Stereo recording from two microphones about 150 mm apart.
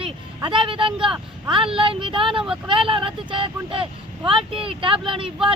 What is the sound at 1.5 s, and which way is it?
Speech, 35° right (ahead or behind).